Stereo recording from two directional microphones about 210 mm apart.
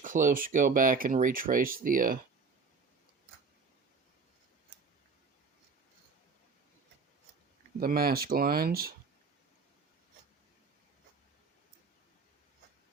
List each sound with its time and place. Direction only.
0.0 s speech: 40° right (ahead or behind)
7.8 s speech: 45° right (ahead or behind)